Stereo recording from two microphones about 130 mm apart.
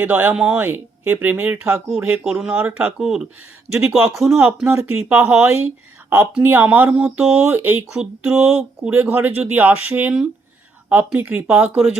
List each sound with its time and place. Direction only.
0.0 s speech: 10° right (ahead or behind)
2.2 s speech: 5° right (ahead or behind)